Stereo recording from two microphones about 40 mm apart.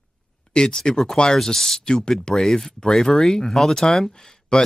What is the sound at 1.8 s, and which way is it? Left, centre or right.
Speech, centre.